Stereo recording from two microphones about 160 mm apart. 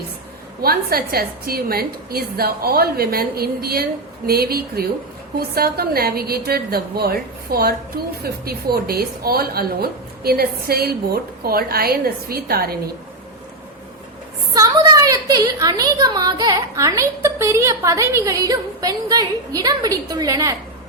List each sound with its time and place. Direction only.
0.6 s a woman's voice: 70° right (ahead or behind)
14.5 s a woman's voice: 25° right (ahead or behind)